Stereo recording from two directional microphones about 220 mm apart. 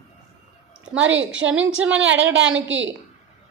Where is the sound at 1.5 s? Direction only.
5° right (ahead or behind).